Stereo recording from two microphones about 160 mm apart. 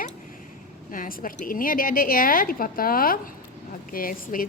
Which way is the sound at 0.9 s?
60° left (ahead or behind).